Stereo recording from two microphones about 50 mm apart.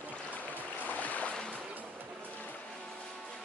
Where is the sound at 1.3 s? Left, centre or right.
Centre.